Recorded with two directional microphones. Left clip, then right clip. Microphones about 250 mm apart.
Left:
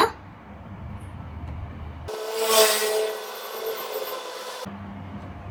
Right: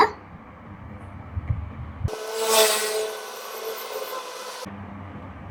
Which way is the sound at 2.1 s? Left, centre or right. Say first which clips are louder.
Even; centre.